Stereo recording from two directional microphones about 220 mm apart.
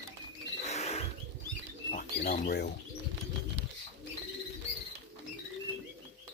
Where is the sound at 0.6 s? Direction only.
30° left (ahead or behind).